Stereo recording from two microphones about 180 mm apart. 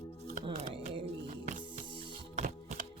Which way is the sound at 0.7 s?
30° right (ahead or behind).